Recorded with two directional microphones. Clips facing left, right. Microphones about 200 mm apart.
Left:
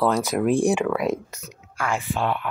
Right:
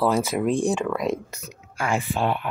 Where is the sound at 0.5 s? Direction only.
10° left (ahead or behind).